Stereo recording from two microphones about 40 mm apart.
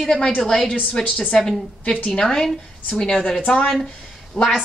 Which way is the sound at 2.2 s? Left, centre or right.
Centre.